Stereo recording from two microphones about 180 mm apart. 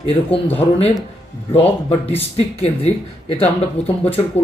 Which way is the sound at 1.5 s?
35° left (ahead or behind).